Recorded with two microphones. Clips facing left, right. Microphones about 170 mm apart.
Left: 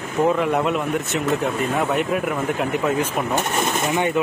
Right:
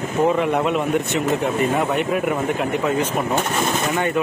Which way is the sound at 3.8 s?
10° left (ahead or behind).